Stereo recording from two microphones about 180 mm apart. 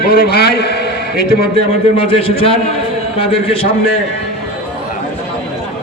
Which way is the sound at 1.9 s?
30° left (ahead or behind).